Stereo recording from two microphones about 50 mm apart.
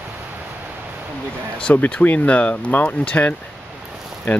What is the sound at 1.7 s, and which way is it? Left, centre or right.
Speech, left.